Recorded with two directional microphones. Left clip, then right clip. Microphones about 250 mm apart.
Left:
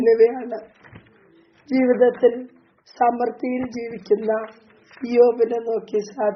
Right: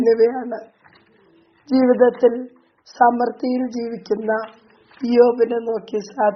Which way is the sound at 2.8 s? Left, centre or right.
Centre.